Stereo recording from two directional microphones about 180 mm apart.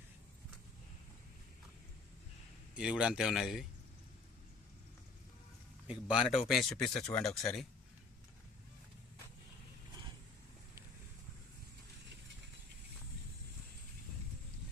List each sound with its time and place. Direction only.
2.7 s speech: 5° right (ahead or behind)
5.9 s speech: 5° right (ahead or behind)